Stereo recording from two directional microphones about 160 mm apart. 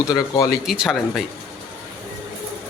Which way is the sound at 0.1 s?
25° left (ahead or behind).